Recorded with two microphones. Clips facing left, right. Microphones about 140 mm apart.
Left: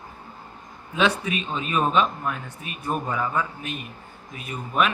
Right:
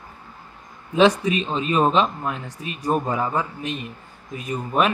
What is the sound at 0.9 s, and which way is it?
A man's voice, 35° right (ahead or behind).